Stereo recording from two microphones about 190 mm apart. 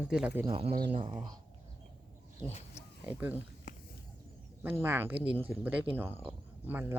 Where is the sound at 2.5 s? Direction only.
35° left (ahead or behind).